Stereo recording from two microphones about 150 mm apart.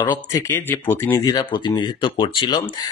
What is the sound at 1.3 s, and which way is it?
Speech, 30° left (ahead or behind).